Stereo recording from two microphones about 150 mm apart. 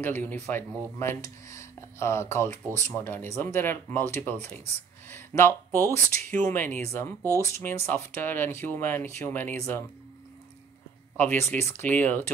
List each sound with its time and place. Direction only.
0.0 s speech: 10° left (ahead or behind)
11.4 s speech: 15° left (ahead or behind)